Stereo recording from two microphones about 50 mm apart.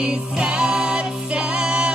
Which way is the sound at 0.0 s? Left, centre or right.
Centre.